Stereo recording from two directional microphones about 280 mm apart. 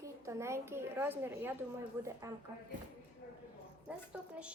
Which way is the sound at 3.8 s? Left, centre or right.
Centre.